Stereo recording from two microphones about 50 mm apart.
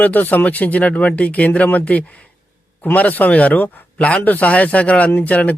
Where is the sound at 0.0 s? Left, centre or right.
Left.